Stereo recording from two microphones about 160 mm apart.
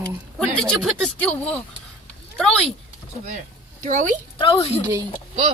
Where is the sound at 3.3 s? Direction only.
50° right (ahead or behind).